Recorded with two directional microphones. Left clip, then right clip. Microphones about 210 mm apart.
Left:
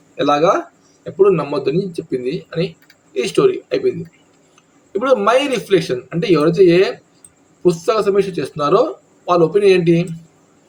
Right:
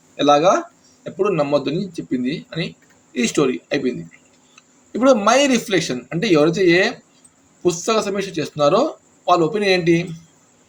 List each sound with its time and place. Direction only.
0.2 s speech: 30° right (ahead or behind)
4.9 s speech: 35° right (ahead or behind)